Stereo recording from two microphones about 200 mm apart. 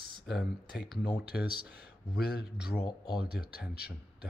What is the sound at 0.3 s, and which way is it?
Speech, centre (ahead or behind).